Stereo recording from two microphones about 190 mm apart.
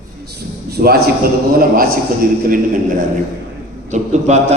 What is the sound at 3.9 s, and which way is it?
Speech, 40° right (ahead or behind).